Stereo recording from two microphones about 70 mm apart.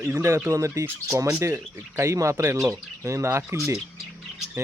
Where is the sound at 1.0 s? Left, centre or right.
Right.